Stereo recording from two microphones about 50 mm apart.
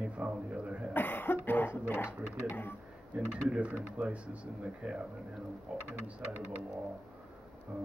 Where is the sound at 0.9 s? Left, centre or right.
Left.